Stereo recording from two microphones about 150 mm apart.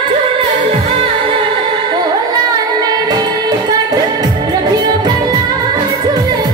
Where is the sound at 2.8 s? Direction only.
25° right (ahead or behind).